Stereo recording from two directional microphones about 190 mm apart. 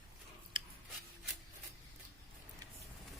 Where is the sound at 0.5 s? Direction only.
25° right (ahead or behind).